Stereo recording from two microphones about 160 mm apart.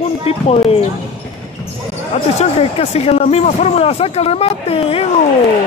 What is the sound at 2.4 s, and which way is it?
A man's voice, 40° left (ahead or behind).